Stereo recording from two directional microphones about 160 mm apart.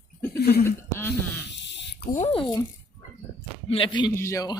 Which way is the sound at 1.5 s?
90° left.